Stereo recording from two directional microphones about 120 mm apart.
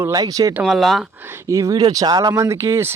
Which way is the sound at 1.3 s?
25° right (ahead or behind).